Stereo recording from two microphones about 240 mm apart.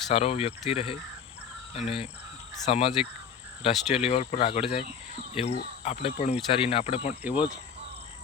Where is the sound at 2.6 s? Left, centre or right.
Left.